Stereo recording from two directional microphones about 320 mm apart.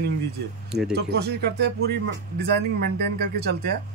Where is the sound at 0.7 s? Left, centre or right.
Centre.